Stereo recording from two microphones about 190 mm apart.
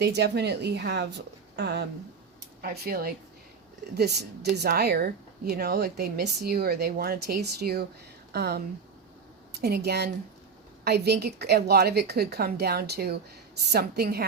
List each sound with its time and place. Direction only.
0.0 s speech: 60° right (ahead or behind)